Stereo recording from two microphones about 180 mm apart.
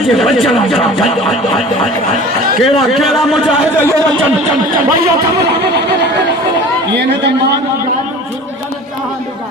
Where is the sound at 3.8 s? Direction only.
20° right (ahead or behind).